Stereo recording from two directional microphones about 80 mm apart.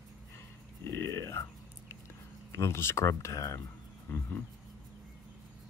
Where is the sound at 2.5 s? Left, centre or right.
Left.